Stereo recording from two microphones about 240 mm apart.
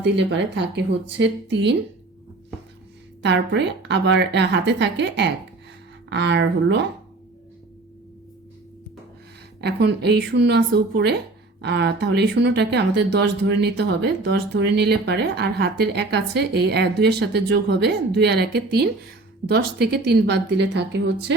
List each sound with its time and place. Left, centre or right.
0.0 s speech: right
3.2 s speech: right
9.6 s speech: right